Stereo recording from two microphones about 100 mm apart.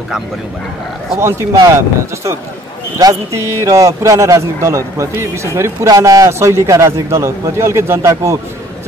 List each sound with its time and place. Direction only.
1.2 s a man's voice: 30° right (ahead or behind)
3.0 s a man's voice: 35° right (ahead or behind)